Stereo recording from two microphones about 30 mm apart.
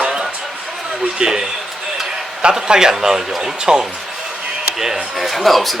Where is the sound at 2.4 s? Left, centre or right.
Right.